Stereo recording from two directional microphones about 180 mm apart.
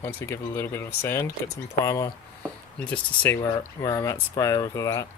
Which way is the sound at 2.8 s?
10° left (ahead or behind).